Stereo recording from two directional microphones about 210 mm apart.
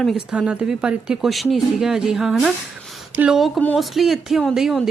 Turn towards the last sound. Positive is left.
turn(degrees=0)  # may be behind; listen again after turning